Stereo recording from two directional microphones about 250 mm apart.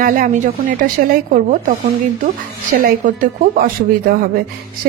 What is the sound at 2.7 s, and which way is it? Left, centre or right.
Speech, right.